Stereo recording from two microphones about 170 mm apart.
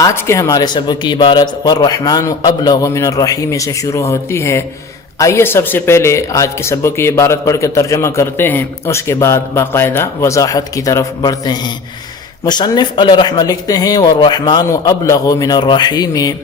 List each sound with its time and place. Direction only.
0.0 s a man's voice: 15° left (ahead or behind)